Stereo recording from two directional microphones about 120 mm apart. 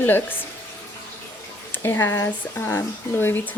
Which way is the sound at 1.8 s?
20° left (ahead or behind).